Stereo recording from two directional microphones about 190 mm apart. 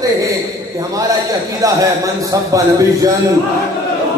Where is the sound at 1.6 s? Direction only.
20° right (ahead or behind).